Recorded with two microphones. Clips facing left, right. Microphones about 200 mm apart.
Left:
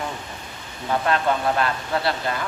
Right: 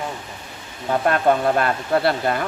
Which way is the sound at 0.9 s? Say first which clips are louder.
Right 4 dB; 50° right (ahead or behind).